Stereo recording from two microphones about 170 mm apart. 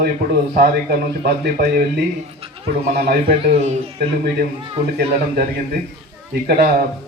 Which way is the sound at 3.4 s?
40° right (ahead or behind).